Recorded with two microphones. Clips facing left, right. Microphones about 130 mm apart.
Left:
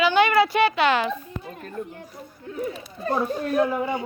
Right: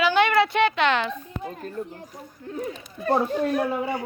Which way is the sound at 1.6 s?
35° right (ahead or behind).